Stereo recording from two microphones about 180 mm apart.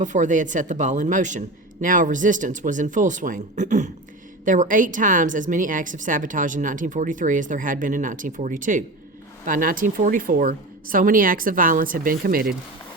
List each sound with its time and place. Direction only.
0.0 s a woman's voice: 45° right (ahead or behind)